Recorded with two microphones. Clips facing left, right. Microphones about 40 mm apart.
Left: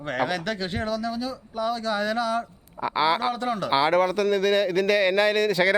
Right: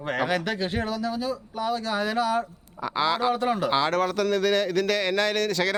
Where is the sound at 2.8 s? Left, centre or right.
Centre.